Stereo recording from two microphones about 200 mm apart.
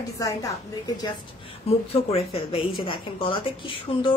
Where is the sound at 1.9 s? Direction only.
30° left (ahead or behind).